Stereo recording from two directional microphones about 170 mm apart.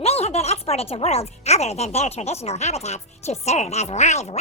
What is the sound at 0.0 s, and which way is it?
Speech, 35° left (ahead or behind).